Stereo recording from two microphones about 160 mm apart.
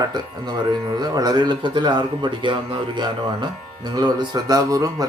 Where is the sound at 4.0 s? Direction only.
25° right (ahead or behind).